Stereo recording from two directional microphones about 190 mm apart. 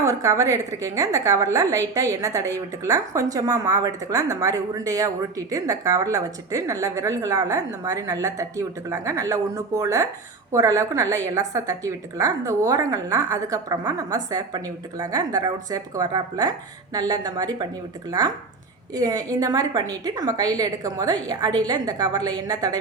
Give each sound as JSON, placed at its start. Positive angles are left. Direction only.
{"t": 0.0, "sound": "a woman's voice", "side_deg": -15}
{"t": 18.9, "sound": "a woman's voice", "side_deg": -20}